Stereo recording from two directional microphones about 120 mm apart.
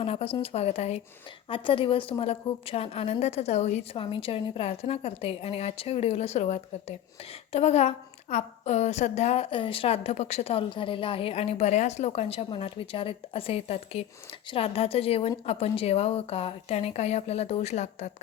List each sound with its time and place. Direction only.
0.0 s a woman's voice: 55° left (ahead or behind)
1.5 s a woman's voice: 45° left (ahead or behind); by 3.8 s 65° left (ahead or behind)
3.9 s a woman's voice: 45° left (ahead or behind); by 18.1 s 65° left (ahead or behind)